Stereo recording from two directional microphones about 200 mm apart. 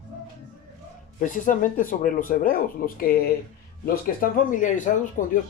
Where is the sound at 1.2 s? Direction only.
40° left (ahead or behind).